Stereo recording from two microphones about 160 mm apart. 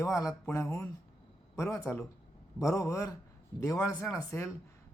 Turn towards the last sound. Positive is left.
turn(degrees=20)  # may be behind; listen again after turning